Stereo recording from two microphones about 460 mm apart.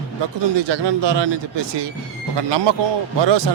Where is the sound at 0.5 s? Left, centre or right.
Right.